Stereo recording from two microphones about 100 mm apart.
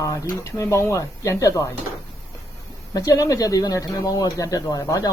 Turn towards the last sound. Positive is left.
turn(degrees=35)  # may be behind; listen again after turning